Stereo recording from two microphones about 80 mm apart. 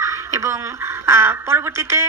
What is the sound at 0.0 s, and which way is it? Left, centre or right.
A woman's voice, right.